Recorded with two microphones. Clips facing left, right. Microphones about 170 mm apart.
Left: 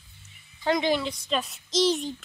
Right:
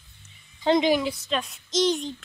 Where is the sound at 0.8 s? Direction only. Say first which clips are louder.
Right 3 dB; 10° right (ahead or behind).